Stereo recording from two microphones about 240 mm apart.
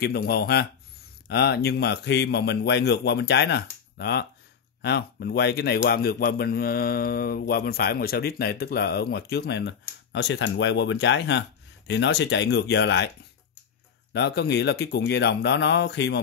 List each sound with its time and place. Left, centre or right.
0.0 s a man's voice: left
14.1 s a man's voice: left